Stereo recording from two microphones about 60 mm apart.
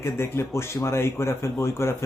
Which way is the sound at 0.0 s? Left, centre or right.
Left.